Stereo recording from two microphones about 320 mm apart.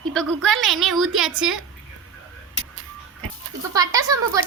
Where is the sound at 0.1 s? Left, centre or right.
Centre.